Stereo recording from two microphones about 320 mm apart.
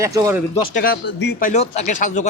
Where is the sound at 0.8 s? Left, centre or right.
Left.